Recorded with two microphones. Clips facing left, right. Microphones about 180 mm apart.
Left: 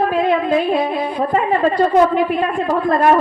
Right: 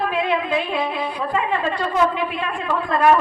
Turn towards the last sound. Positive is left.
turn(degrees=40)  # may be behind; listen again after turning